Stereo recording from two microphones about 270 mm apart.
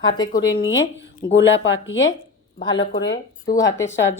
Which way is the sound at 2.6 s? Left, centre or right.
Centre.